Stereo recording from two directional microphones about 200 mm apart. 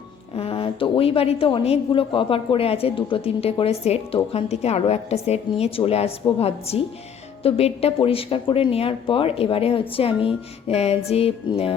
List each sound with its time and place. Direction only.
0.3 s speech: 25° left (ahead or behind)
10.2 s music: 30° left (ahead or behind)